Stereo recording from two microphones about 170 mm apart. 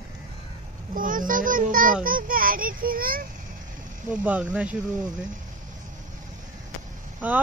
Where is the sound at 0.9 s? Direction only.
55° right (ahead or behind).